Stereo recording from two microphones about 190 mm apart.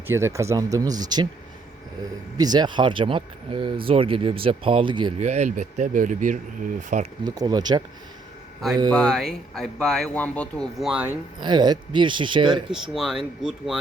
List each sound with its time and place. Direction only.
0.1 s speech: 15° right (ahead or behind)
2.4 s speech: 20° right (ahead or behind)
5.2 s speech: 35° right (ahead or behind)
7.3 s speech: 20° right (ahead or behind)
8.9 s speech: 5° left (ahead or behind)
11.3 s speech: 25° right (ahead or behind)
12.7 s speech: centre (ahead or behind)